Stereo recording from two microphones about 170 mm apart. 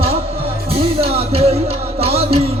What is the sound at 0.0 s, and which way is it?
Music, 35° right (ahead or behind).